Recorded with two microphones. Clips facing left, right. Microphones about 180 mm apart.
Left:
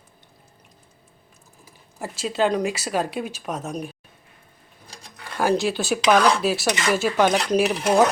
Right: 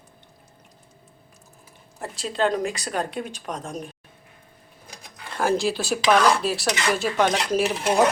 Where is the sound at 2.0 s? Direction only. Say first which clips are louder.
Left 2 dB; 5° left (ahead or behind).